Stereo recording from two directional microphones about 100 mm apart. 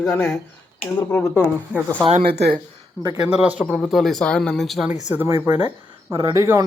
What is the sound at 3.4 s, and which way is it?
Speech, 10° right (ahead or behind).